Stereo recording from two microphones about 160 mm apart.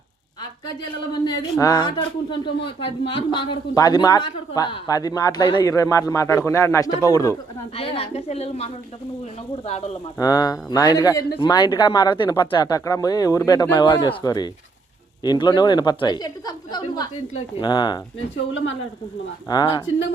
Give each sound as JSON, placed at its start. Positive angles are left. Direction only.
{"t": 1.1, "sound": "a woman's voice", "side_deg": 30}
{"t": 7.8, "sound": "a woman's voice", "side_deg": 40}
{"t": 10.2, "sound": "a woman's voice", "side_deg": 25}
{"t": 19.5, "sound": "a woman's voice", "side_deg": 25}